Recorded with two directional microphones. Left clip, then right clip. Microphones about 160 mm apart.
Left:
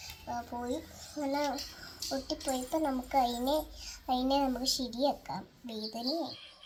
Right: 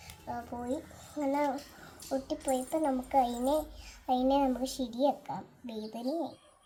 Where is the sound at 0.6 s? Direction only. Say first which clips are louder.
Even; 15° right (ahead or behind).